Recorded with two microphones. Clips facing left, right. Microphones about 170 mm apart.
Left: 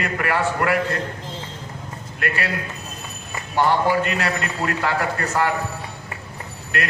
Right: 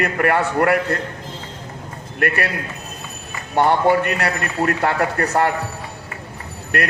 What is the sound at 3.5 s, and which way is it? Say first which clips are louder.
A man's voice: right 3 dB; 55° right (ahead or behind).